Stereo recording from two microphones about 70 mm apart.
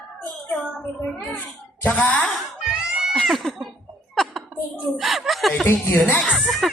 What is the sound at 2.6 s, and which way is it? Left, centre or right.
Goat, centre.